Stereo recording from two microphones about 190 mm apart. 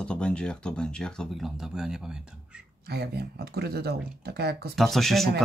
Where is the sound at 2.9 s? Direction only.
60° right (ahead or behind).